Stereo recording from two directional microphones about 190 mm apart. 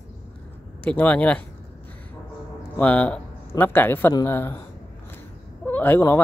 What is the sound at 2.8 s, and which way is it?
Speech, 5° left (ahead or behind).